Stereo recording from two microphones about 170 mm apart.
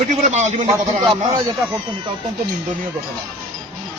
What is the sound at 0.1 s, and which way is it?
Speech, 45° right (ahead or behind).